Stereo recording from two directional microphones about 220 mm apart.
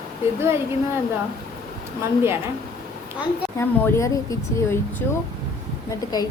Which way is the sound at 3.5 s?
10° left (ahead or behind).